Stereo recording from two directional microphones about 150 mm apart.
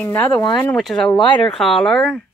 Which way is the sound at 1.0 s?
30° left (ahead or behind).